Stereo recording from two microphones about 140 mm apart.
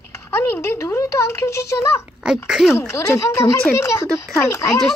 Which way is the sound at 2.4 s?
5° right (ahead or behind).